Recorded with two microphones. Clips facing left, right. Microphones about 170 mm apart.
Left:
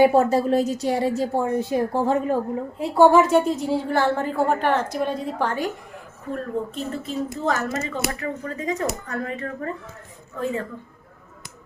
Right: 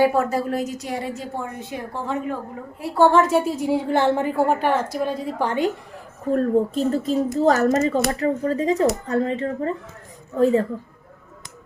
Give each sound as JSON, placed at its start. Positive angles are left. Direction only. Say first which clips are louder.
{"t": 0.0, "sound": "a woman's voice", "louder": "left 3 dB", "side_deg": 30}
{"t": 2.7, "sound": "a woman's voice", "louder": "left 1 dB", "side_deg": 15}
{"t": 5.4, "sound": "a woman's voice", "louder": "right 3 dB", "side_deg": -15}
{"t": 6.3, "sound": "speech", "louder": "right 8 dB", "side_deg": -35}